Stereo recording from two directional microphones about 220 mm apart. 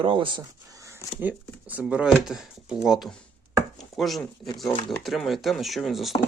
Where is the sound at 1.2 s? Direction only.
10° right (ahead or behind).